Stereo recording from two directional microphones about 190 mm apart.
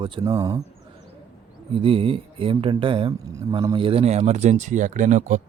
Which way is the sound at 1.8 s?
30° right (ahead or behind).